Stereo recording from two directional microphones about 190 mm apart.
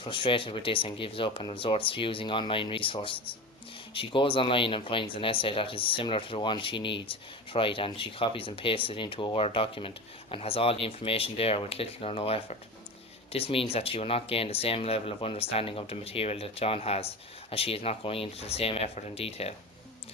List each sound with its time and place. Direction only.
0.0 s speech: 25° left (ahead or behind)